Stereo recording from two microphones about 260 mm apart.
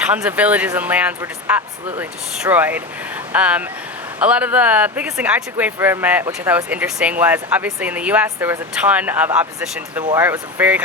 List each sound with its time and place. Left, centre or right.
0.0 s speech: centre